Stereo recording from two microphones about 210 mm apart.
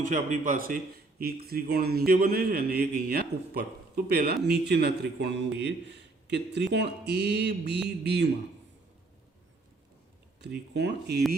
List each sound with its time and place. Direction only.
0.0 s a man's voice: 35° right (ahead or behind)
10.4 s a man's voice: 55° right (ahead or behind)